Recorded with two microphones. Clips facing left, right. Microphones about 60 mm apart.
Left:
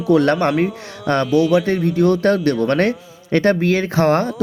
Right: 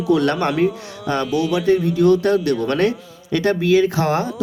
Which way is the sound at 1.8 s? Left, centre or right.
Left.